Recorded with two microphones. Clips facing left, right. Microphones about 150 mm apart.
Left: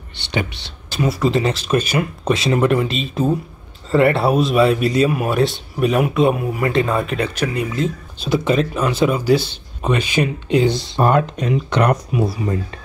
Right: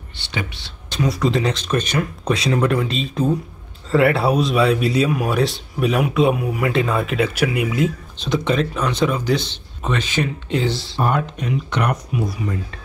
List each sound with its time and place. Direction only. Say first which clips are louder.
0.8 s speech: left 1 dB; 5° left (ahead or behind); by 7.9 s 10° right (ahead or behind)
8.2 s speech: left 2 dB; 5° left (ahead or behind)
11.0 s speech: left 5 dB; 90° left
12.3 s speech: left 3 dB; 30° left (ahead or behind)